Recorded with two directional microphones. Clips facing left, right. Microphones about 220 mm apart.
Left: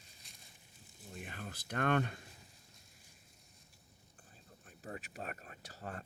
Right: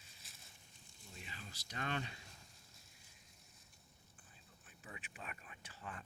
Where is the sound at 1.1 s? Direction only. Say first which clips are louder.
Left 8 dB; 55° left (ahead or behind).